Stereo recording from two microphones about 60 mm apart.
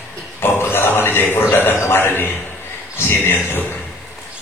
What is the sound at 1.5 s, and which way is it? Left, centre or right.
Music, left.